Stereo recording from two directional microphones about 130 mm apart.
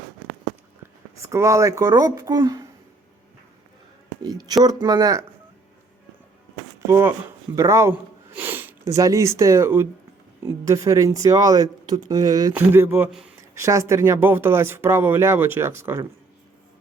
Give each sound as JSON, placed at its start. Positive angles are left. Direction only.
{"t": 1.2, "sound": "speech", "side_deg": -25}
{"t": 4.2, "sound": "speech", "side_deg": -30}
{"t": 6.8, "sound": "speech", "side_deg": -20}
{"t": 12.5, "sound": "a sound", "side_deg": -15}
{"t": 13.1, "sound": "speech", "side_deg": -5}
{"t": 13.5, "sound": "speech", "side_deg": -25}